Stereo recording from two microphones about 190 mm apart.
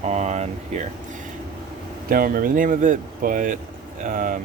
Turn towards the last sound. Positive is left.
turn(degrees=-45)  # may be behind; listen again after turning